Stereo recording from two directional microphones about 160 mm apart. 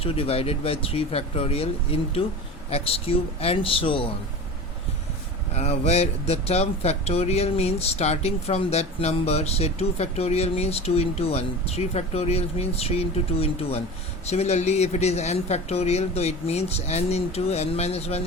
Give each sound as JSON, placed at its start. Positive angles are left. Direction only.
{"t": 0.0, "sound": "speech", "side_deg": 35}
{"t": 5.5, "sound": "speech", "side_deg": 40}